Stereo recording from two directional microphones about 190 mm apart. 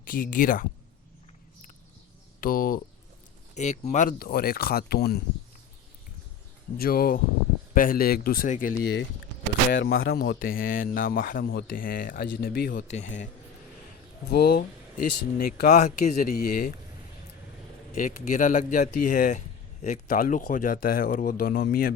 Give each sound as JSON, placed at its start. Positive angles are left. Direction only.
{"t": 0.0, "sound": "speech", "side_deg": 45}
{"t": 2.4, "sound": "speech", "side_deg": 45}
{"t": 3.5, "sound": "speech", "side_deg": 35}
{"t": 6.7, "sound": "speech", "side_deg": 50}
{"t": 9.7, "sound": "speech", "side_deg": 65}
{"t": 14.3, "sound": "speech", "side_deg": 55}
{"t": 15.8, "sound": "speech", "side_deg": 40}
{"t": 16.3, "sound": "speech", "side_deg": 50}
{"t": 17.9, "sound": "speech", "side_deg": 45}